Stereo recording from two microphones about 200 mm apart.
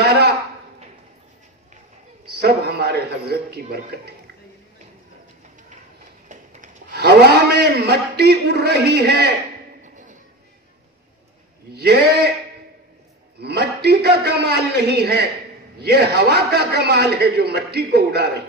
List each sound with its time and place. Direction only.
0.0 s a sound: 50° right (ahead or behind)
2.4 s a man's voice: 55° right (ahead or behind)
6.2 s a man's voice: 45° right (ahead or behind)
11.7 s a man's voice: 50° right (ahead or behind)
13.4 s a man's voice: 50° right (ahead or behind)